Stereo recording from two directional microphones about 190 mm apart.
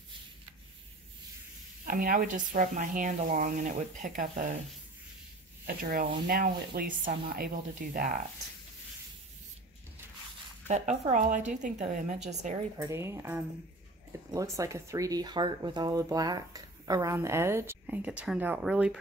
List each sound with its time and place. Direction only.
1.9 s speech: 45° right (ahead or behind)
5.9 s speech: 50° right (ahead or behind)
10.7 s a woman's voice: 35° right (ahead or behind)
12.7 s speech: 15° right (ahead or behind)